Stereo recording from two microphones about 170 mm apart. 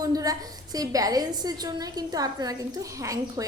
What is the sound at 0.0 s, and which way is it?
A woman's voice, 20° right (ahead or behind).